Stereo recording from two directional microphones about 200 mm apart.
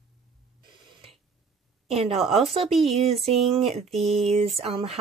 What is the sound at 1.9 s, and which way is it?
Speech, 30° right (ahead or behind).